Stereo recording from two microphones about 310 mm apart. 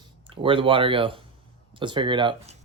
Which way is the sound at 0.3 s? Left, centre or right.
Centre.